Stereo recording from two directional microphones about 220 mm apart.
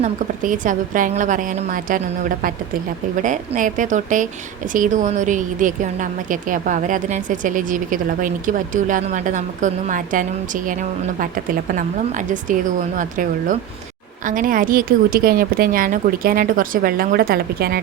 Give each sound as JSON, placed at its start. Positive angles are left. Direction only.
{"t": 0.0, "sound": "speech", "side_deg": -35}
{"t": 3.2, "sound": "speech", "side_deg": -35}